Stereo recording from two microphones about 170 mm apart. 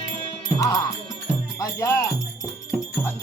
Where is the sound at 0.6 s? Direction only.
20° left (ahead or behind).